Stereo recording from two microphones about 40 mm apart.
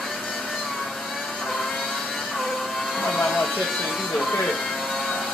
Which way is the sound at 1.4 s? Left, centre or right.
Centre.